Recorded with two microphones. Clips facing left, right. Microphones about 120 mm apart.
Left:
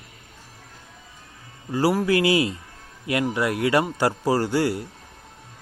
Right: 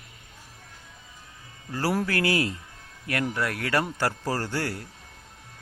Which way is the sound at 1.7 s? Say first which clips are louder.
Left 6 dB; 15° left (ahead or behind).